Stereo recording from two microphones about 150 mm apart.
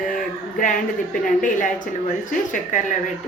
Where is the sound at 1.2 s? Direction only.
60° left (ahead or behind).